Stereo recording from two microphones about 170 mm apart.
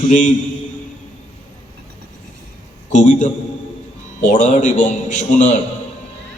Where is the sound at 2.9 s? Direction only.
45° left (ahead or behind).